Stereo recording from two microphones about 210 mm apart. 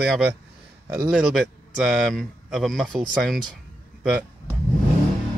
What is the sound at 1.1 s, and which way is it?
Speech, centre (ahead or behind).